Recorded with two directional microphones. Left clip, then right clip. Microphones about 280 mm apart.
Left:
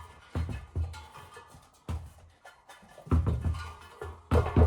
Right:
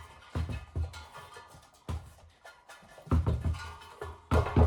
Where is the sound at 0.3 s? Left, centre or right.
Centre.